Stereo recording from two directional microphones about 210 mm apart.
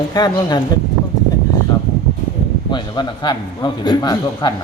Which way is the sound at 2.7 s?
20° left (ahead or behind).